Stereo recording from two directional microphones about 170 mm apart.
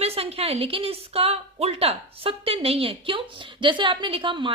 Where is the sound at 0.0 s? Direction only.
35° right (ahead or behind).